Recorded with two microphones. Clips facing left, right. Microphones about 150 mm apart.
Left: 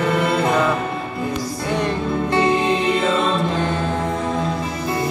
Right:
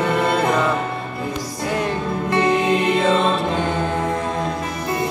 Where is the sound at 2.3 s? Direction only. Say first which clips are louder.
Right 1 dB; 30° left (ahead or behind).